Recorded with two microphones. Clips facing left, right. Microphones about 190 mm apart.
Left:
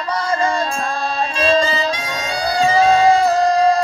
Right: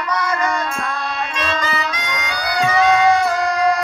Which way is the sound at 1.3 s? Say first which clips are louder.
Left 8 dB; 30° left (ahead or behind).